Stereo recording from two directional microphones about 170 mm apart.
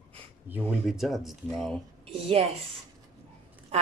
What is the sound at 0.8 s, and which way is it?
Speech, centre (ahead or behind).